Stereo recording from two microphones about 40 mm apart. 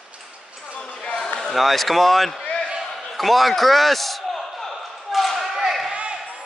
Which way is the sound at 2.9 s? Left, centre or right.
Centre.